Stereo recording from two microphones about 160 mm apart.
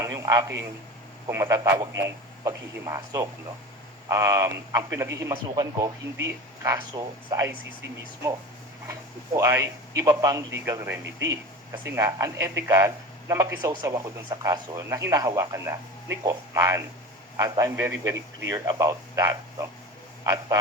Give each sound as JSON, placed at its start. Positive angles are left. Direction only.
{"t": 0.0, "sound": "a sound", "side_deg": -20}
{"t": 1.3, "sound": "speech", "side_deg": -20}
{"t": 8.9, "sound": "speech", "side_deg": -20}